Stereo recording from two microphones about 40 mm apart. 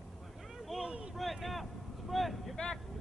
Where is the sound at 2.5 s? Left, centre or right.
Centre.